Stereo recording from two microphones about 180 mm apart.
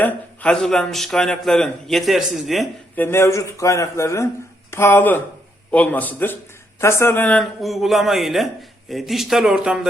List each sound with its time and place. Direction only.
0.0 s a man's voice: 5° left (ahead or behind)
2.9 s a man's voice: 10° left (ahead or behind)